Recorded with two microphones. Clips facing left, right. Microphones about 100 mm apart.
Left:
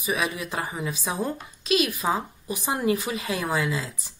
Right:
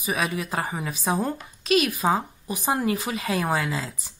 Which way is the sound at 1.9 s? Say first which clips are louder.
Right 3 dB; 30° right (ahead or behind).